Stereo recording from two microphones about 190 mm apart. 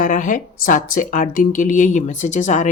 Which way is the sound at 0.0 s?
45° left (ahead or behind).